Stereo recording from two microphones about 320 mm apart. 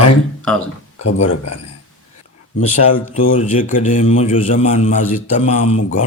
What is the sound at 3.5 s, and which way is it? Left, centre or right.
A man's voice, left.